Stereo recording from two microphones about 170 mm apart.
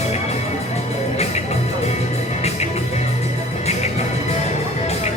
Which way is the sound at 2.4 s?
40° left (ahead or behind).